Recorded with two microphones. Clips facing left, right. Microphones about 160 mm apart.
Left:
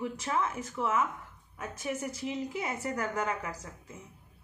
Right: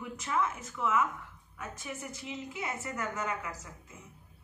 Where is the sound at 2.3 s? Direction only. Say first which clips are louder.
Left 3 dB; 35° left (ahead or behind).